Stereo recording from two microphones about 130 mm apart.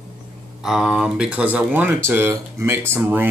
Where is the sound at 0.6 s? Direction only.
5° right (ahead or behind).